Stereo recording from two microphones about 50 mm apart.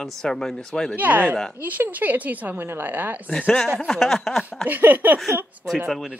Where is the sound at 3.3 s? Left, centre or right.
Left.